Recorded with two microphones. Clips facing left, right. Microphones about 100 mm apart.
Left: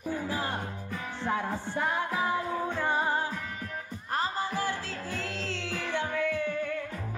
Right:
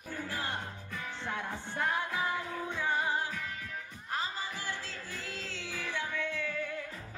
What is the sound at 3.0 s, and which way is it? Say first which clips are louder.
Music: left 4 dB; 40° left (ahead or behind).